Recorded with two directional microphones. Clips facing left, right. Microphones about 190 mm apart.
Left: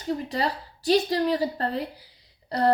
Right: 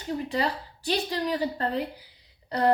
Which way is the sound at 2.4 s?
35° left (ahead or behind).